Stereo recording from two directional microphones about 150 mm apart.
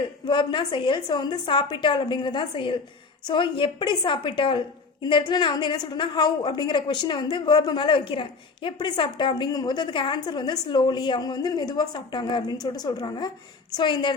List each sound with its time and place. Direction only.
0.3 s a woman's voice: 30° left (ahead or behind)